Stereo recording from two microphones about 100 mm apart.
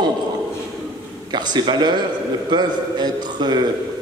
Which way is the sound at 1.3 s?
45° right (ahead or behind).